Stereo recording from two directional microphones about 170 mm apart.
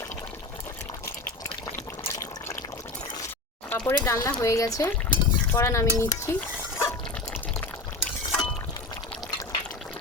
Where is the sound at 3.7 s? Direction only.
10° left (ahead or behind).